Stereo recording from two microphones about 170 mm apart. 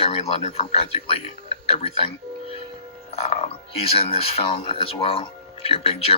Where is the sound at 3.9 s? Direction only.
35° left (ahead or behind).